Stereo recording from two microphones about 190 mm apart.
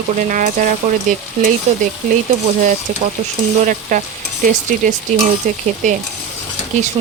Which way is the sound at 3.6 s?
45° right (ahead or behind).